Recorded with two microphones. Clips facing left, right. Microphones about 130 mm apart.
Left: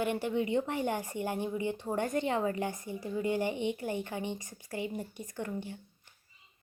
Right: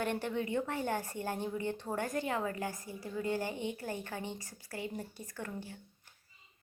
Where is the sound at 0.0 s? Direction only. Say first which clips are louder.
Left 4 dB; 10° left (ahead or behind).